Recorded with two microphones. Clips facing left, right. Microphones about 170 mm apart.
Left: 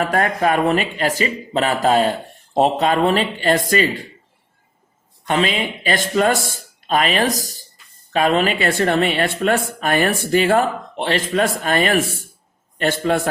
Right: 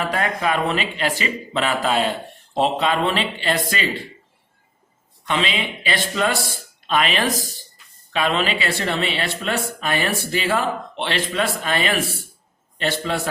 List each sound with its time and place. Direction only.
0.0 s a woman's voice: 45° left (ahead or behind)
5.2 s a woman's voice: 45° left (ahead or behind)